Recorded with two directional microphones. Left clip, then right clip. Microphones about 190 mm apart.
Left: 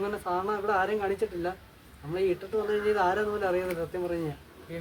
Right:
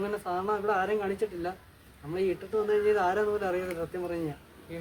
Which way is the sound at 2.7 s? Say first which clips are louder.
Right 1 dB; 10° right (ahead or behind).